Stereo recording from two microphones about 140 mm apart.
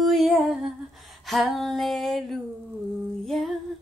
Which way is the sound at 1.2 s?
Centre (ahead or behind).